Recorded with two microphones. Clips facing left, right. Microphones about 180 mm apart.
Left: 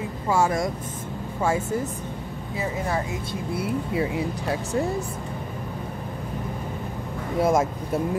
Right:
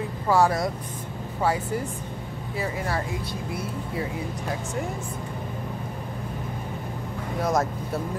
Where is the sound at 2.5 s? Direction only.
20° left (ahead or behind).